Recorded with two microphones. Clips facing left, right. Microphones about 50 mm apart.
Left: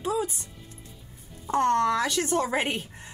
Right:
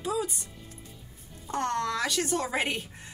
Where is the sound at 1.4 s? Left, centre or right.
Left.